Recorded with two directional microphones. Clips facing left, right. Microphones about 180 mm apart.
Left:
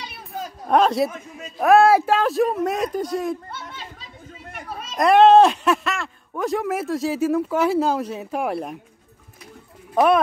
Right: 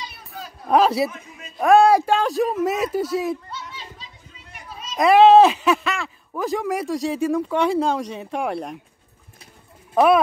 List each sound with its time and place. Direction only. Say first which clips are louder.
0.7 s speech: even; centre (ahead or behind)
3.4 s children playing: even; 55° left (ahead or behind)
4.5 s a sound: left 4 dB; 55° left (ahead or behind)
4.9 s speech: right 1 dB; centre (ahead or behind)
9.9 s speech: right 1 dB; 5° right (ahead or behind)